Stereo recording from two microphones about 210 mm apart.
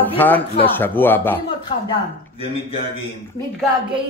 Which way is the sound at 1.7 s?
25° left (ahead or behind).